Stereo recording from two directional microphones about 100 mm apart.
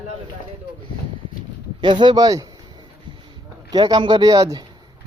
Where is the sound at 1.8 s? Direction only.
50° right (ahead or behind).